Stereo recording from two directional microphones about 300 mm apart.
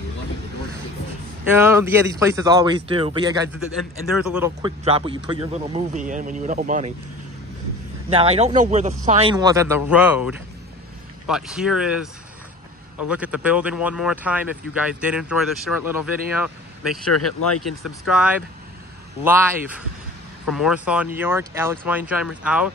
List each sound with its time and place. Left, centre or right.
1.5 s speech: centre
4.1 s a man's voice: centre; by 6.9 s right
8.1 s a man's voice: centre
13.1 s speech: centre
17.1 s speech: left
18.0 s speech: centre